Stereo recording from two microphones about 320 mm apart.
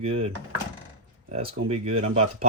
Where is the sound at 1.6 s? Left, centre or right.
Centre.